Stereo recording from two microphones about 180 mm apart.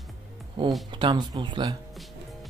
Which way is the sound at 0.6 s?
25° right (ahead or behind).